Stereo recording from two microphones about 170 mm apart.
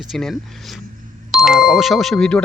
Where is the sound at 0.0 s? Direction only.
Centre (ahead or behind).